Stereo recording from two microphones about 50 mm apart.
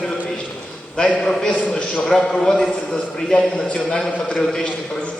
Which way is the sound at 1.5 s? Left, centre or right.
Left.